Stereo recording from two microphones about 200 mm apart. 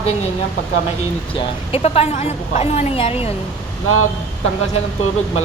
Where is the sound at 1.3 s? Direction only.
30° left (ahead or behind).